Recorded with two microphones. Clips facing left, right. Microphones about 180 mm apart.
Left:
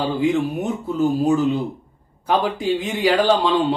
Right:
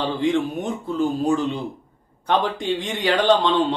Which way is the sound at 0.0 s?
5° left (ahead or behind).